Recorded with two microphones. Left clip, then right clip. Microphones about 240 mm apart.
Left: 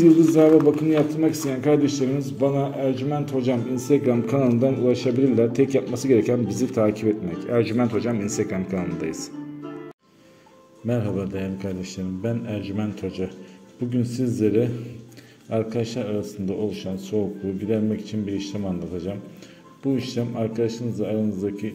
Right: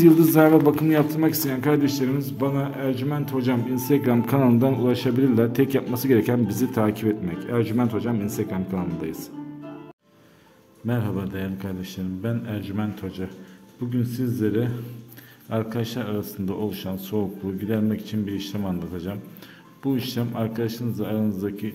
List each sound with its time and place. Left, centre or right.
0.4 s a man's voice: right
10.9 s a man's voice: centre